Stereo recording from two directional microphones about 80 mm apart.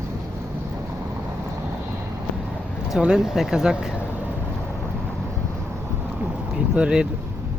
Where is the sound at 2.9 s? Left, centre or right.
Centre.